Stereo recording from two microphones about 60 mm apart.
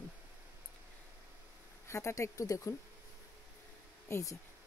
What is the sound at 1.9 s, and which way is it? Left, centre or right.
Speech, left.